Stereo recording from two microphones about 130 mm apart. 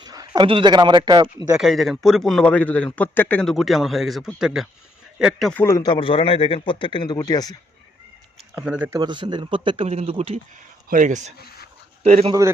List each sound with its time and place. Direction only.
0.0 s a sound: 30° right (ahead or behind)
0.4 s speech: 40° right (ahead or behind)
1.5 s a man's voice: centre (ahead or behind)
3.4 s a man's voice: centre (ahead or behind)
5.5 s speech: 20° left (ahead or behind)
5.9 s speech: 45° left (ahead or behind)
8.5 s speech: 10° right (ahead or behind)
8.9 s speech: 35° right (ahead or behind); by 10.4 s 50° right (ahead or behind)
10.8 s speech: 85° right
12.0 s speech: 55° right (ahead or behind)